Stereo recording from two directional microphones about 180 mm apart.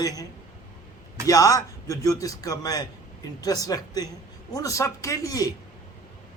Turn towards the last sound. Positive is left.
turn(degrees=20)  # may be behind; listen again after turning